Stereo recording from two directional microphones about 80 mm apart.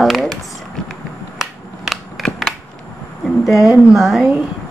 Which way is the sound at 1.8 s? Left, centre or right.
Centre.